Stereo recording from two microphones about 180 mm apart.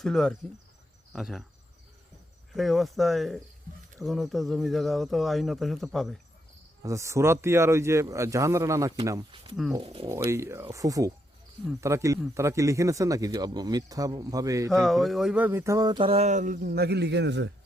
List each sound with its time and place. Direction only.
0.0 s speech: 5° left (ahead or behind)
2.6 s speech: centre (ahead or behind)
6.8 s speech: 15° right (ahead or behind)
9.8 s speech: 30° right (ahead or behind)
10.2 s speech: 15° right (ahead or behind)
14.7 s speech: centre (ahead or behind); by 17.5 s 70° right (ahead or behind)